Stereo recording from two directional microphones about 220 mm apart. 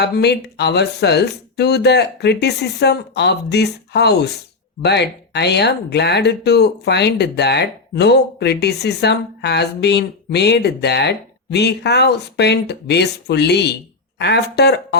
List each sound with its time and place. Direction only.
0.0 s speech: 50° left (ahead or behind)